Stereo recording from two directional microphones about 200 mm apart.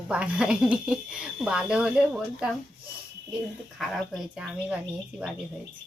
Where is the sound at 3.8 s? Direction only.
Centre (ahead or behind).